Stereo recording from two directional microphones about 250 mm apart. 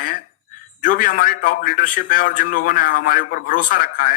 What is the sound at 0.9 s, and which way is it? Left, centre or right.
A man's voice, left.